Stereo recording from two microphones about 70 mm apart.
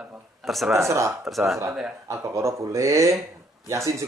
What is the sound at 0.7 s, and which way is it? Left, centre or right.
Speech, right.